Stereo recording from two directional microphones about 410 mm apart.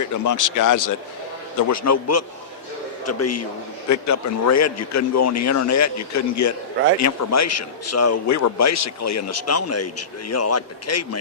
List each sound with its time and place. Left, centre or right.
0.3 s a man's voice: left